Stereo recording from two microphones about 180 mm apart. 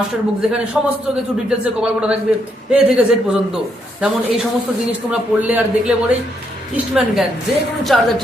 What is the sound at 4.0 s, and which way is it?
A man's voice, 5° right (ahead or behind).